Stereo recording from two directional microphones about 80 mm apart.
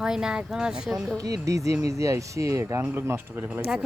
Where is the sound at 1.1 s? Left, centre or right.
Right.